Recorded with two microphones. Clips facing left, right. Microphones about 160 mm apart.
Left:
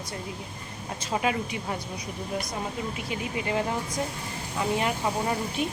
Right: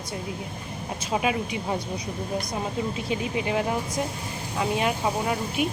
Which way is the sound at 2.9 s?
25° right (ahead or behind).